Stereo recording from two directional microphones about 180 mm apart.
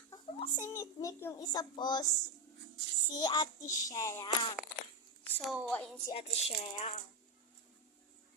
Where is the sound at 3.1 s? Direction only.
20° left (ahead or behind).